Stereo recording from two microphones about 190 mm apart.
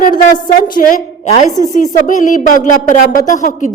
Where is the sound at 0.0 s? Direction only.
45° left (ahead or behind).